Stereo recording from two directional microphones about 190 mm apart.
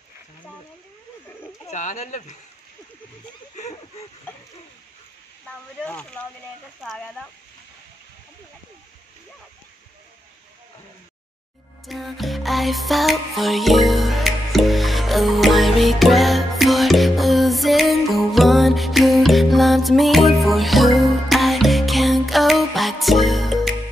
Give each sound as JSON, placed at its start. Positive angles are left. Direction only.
{"t": 1.7, "sound": "speech", "side_deg": 40}
{"t": 5.9, "sound": "speech", "side_deg": 5}
{"t": 11.8, "sound": "music", "side_deg": 0}